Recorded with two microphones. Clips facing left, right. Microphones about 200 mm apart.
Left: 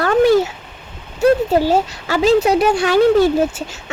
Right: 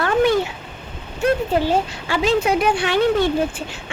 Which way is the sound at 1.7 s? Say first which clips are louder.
Left 3 dB; 40° left (ahead or behind).